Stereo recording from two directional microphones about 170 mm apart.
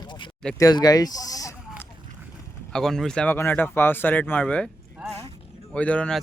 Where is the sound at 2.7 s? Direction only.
Centre (ahead or behind).